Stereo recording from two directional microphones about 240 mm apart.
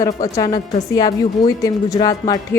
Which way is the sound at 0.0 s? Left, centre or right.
Centre.